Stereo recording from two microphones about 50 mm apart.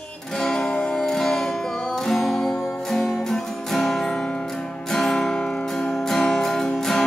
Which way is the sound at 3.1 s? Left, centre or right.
Centre.